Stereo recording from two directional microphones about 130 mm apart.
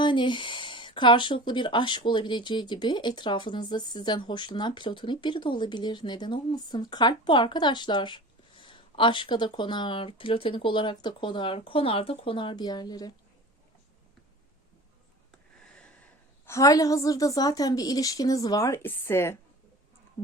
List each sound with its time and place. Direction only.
0.0 s speech: 35° left (ahead or behind)
16.5 s a woman's voice: 25° left (ahead or behind)